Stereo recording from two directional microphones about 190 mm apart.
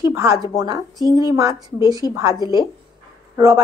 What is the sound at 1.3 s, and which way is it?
Speech, 15° right (ahead or behind).